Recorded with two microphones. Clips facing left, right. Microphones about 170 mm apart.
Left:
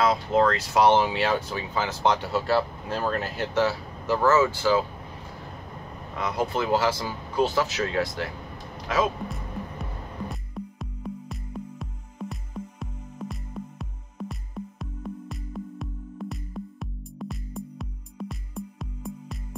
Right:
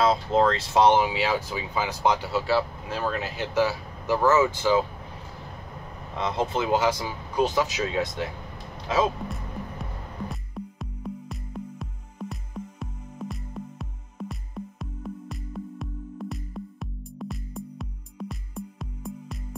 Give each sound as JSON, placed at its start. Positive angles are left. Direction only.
{"t": 0.0, "sound": "speech", "side_deg": -25}
{"t": 3.5, "sound": "speech", "side_deg": -15}
{"t": 6.1, "sound": "speech", "side_deg": -25}
{"t": 9.3, "sound": "music", "side_deg": 0}